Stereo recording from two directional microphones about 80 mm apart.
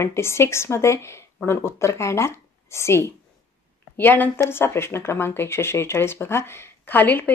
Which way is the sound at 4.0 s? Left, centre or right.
Left.